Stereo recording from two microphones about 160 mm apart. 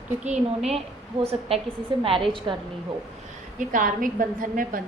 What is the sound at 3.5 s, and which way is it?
A woman's voice, 55° right (ahead or behind).